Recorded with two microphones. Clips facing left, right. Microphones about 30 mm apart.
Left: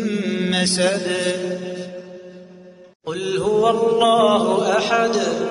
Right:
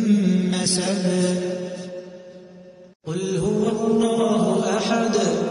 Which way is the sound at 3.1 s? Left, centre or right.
Left.